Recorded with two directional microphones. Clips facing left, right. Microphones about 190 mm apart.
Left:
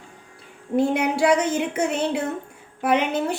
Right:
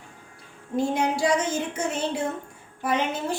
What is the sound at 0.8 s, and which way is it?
A woman's voice, 65° left (ahead or behind).